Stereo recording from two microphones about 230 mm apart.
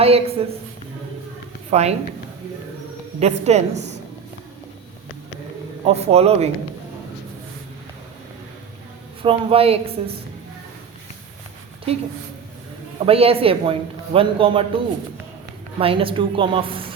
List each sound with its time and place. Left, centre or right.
0.0 s a man's voice: right
1.7 s a man's voice: right
3.2 s a man's voice: right
5.8 s a man's voice: right
9.2 s a man's voice: right
13.1 s a man's voice: right
15.8 s a man's voice: right